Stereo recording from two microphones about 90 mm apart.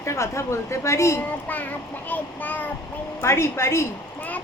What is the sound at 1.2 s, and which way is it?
A woman's voice, 20° left (ahead or behind).